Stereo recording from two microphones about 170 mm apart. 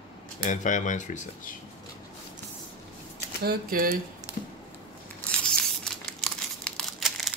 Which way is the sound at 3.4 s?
60° right (ahead or behind).